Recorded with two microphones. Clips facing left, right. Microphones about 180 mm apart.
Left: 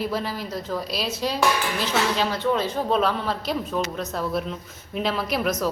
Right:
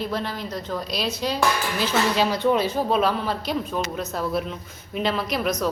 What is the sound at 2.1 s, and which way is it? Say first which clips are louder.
Speech: right 3 dB; 15° right (ahead or behind).